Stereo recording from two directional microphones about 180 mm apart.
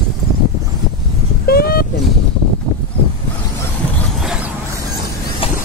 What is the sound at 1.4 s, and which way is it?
Vehicle, 60° left (ahead or behind).